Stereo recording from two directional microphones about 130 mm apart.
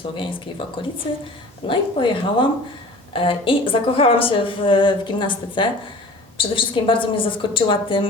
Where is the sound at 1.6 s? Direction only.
40° left (ahead or behind).